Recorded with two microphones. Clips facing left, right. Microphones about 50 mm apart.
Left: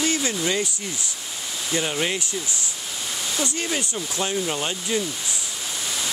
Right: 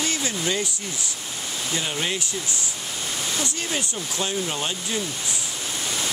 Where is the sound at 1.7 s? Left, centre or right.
Left.